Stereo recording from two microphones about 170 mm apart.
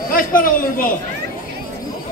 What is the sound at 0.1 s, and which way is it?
Speech, 55° left (ahead or behind).